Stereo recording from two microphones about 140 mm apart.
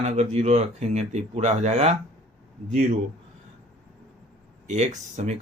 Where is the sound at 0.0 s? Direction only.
55° right (ahead or behind).